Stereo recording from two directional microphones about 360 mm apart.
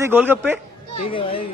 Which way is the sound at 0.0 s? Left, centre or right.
Centre.